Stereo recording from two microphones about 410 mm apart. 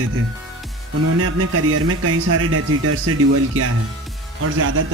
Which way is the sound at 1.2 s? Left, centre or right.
Right.